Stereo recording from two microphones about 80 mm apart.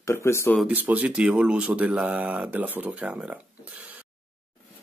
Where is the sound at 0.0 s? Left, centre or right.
Left.